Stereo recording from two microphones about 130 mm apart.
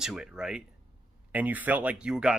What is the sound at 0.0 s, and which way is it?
Speech, 5° right (ahead or behind).